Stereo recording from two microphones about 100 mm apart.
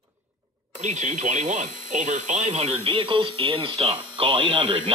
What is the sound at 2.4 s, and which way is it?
Speech, 90° right.